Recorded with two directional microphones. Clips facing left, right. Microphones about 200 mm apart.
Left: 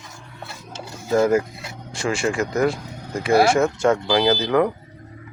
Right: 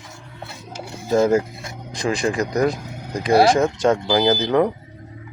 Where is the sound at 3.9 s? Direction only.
20° right (ahead or behind).